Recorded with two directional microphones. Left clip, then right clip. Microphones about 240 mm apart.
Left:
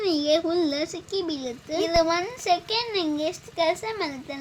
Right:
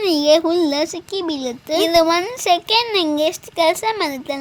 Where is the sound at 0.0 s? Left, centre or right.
Right.